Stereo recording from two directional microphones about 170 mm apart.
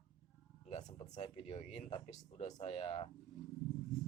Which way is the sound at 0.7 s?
45° left (ahead or behind).